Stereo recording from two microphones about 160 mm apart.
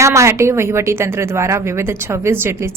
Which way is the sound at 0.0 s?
20° right (ahead or behind).